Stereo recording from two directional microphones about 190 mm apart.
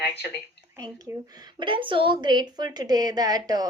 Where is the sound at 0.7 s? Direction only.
20° right (ahead or behind).